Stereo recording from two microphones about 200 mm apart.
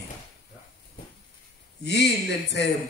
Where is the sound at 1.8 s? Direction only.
55° left (ahead or behind).